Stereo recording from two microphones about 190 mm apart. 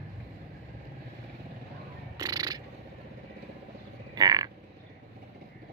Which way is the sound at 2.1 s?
20° right (ahead or behind).